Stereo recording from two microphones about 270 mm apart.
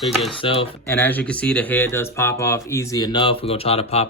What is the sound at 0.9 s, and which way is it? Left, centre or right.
Speech, centre.